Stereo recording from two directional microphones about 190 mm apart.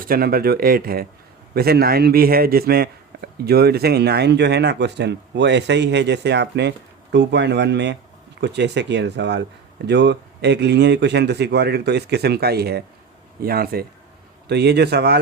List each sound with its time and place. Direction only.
0.0 s a man's voice: 50° right (ahead or behind)